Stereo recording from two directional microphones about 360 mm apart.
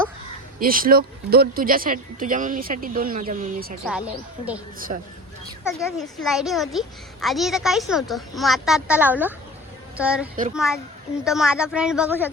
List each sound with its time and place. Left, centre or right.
0.6 s speech: right
3.8 s a child's voice: centre
4.9 s speech: centre
5.6 s a child's voice: centre